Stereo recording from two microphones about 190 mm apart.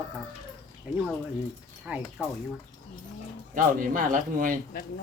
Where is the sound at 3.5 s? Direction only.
45° right (ahead or behind).